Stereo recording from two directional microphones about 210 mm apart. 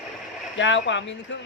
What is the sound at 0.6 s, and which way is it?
Speech, 60° left (ahead or behind).